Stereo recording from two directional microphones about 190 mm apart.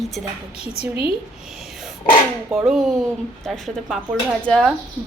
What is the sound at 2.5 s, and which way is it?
A woman's voice, centre (ahead or behind).